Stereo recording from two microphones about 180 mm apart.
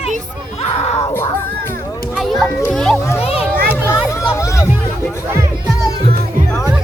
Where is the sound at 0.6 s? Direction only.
35° left (ahead or behind).